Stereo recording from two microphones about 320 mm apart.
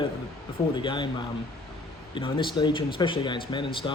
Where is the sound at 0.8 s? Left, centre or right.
Centre.